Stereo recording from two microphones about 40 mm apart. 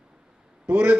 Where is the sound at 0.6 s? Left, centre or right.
Right.